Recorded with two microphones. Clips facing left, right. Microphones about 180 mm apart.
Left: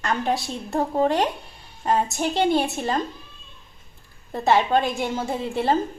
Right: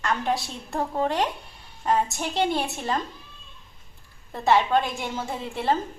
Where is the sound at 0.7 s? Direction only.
30° left (ahead or behind).